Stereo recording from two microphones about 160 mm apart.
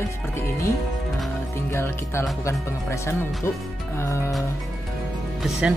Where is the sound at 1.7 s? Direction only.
15° left (ahead or behind).